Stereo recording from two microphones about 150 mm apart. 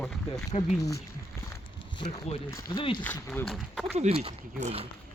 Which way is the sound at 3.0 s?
10° left (ahead or behind).